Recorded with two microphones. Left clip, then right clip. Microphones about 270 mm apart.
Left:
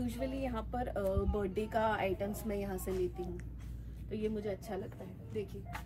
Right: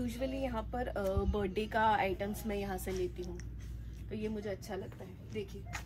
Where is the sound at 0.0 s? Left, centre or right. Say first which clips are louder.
Right 1 dB; centre.